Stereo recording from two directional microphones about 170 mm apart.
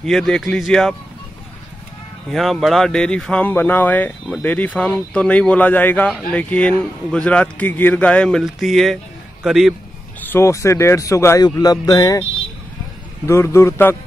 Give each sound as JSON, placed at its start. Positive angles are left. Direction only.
{"t": 0.0, "sound": "speech", "side_deg": 0}
{"t": 2.3, "sound": "speech", "side_deg": 0}
{"t": 10.3, "sound": "speech", "side_deg": 15}